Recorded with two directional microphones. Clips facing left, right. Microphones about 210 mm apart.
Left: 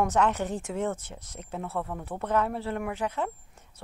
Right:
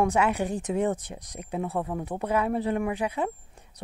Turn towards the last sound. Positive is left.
turn(degrees=-15)  # may be behind; listen again after turning